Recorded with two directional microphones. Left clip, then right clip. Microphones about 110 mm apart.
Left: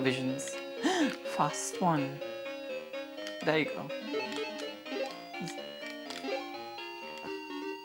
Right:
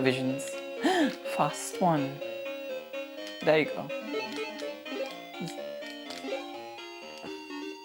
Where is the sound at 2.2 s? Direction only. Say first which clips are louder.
Right 3 dB; 15° left (ahead or behind).